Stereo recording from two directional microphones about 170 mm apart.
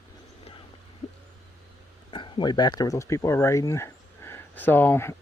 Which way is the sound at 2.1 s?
30° left (ahead or behind).